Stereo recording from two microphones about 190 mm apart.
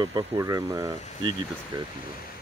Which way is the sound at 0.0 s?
20° right (ahead or behind).